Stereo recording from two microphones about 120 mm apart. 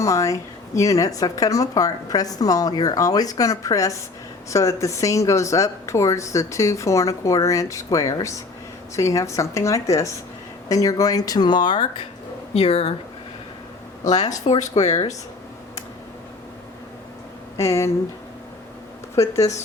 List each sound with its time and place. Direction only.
0.0 s speech: 25° left (ahead or behind)
12.5 s speech: 55° left (ahead or behind)
14.0 s speech: 85° left
17.6 s speech: 25° left (ahead or behind)
19.1 s speech: 25° left (ahead or behind)